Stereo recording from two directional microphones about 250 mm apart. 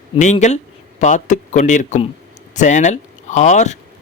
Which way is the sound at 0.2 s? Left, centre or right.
Left.